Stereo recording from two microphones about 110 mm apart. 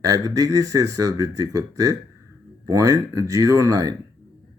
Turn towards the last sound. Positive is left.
turn(degrees=-35)  # may be behind; listen again after turning